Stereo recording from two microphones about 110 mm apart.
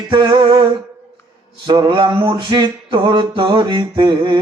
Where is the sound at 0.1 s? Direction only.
45° right (ahead or behind).